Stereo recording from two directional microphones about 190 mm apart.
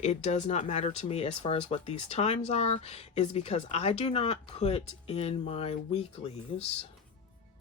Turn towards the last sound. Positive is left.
turn(degrees=30)  # may be behind; listen again after turning